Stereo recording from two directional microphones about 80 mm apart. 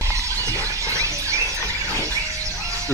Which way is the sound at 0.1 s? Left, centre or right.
Right.